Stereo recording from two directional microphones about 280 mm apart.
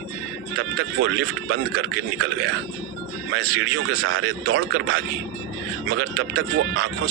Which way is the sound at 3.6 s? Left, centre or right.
Right.